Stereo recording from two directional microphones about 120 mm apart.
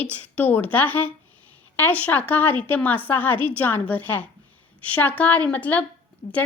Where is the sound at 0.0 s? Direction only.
15° left (ahead or behind).